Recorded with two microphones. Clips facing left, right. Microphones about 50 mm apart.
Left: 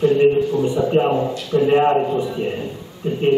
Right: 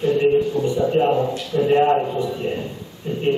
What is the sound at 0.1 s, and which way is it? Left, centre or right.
A man's voice, centre.